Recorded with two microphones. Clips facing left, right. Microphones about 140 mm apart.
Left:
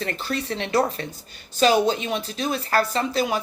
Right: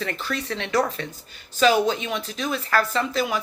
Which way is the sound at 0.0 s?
35° left (ahead or behind).